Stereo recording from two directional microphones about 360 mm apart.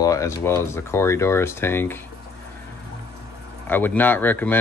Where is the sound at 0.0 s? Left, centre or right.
Centre.